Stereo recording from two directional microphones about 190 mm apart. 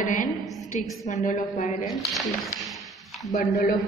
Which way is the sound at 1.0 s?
40° left (ahead or behind).